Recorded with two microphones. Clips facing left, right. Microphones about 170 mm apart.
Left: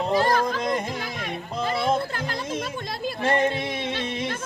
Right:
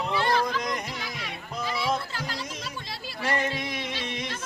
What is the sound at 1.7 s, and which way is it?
Music, 50° left (ahead or behind).